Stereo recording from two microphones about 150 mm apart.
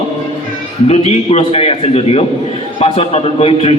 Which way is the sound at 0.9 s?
45° left (ahead or behind).